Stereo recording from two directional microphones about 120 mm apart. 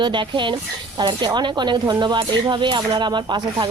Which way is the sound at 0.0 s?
40° right (ahead or behind).